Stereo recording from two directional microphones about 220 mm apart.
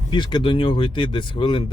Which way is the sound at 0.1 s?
20° left (ahead or behind).